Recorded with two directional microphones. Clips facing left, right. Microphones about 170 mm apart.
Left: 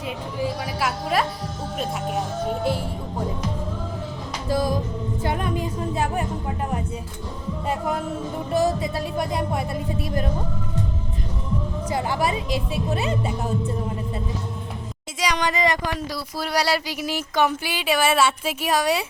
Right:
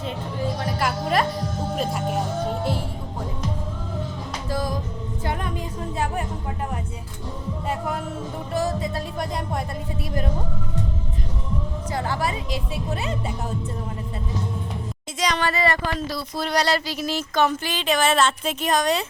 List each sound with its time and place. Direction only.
0.0 s speech: 10° left (ahead or behind)
1.7 s music: centre (ahead or behind)
4.4 s music: 10° left (ahead or behind)
5.2 s speech: 10° left (ahead or behind)
7.7 s speech: 15° left (ahead or behind)
8.5 s music: 15° left (ahead or behind)
11.9 s speech: 15° left (ahead or behind)
15.2 s speech: 15° left (ahead or behind)